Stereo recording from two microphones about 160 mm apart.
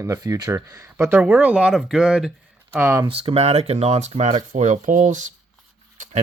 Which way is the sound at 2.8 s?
15° right (ahead or behind).